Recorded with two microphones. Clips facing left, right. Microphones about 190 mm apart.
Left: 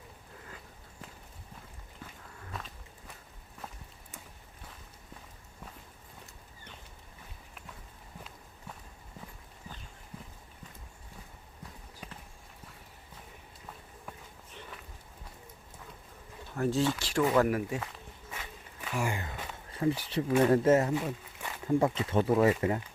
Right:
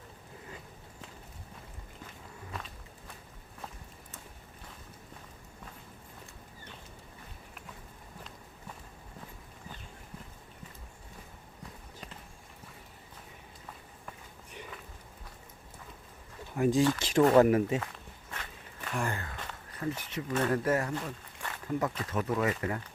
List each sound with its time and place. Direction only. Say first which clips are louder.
2.5 s walk: even; centre (ahead or behind)
16.6 s speech: right 3 dB; 15° right (ahead or behind)
17.7 s walk: right 2 dB; 5° left (ahead or behind)
19.8 s speech: left 6 dB; 30° left (ahead or behind)
20.2 s speech: left 6 dB; 10° left (ahead or behind)
20.5 s speech: left 5 dB; 25° left (ahead or behind)
20.9 s a sound: left 5 dB; 10° left (ahead or behind)
21.7 s speech: left 5 dB; 25° left (ahead or behind)